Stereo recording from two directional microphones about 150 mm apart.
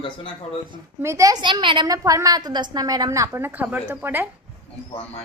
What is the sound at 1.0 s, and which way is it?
A woman's voice, 20° right (ahead or behind).